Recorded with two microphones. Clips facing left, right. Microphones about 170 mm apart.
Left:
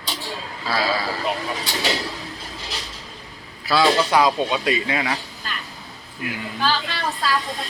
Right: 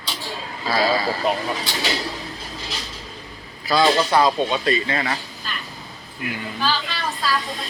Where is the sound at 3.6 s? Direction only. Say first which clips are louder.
Even; 5° left (ahead or behind).